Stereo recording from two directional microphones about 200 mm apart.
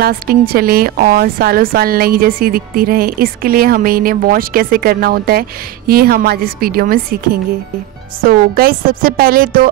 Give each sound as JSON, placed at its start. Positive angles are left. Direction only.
{"t": 0.0, "sound": "a woman's voice", "side_deg": -50}